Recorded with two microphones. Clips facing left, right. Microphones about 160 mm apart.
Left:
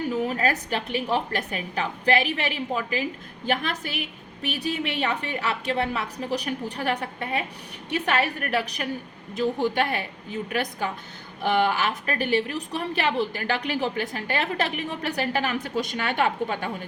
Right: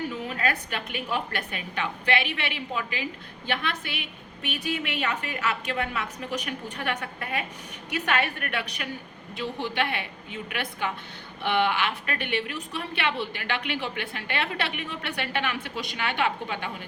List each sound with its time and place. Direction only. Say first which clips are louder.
0.1 s a woman's voice: left 5 dB; 40° left (ahead or behind)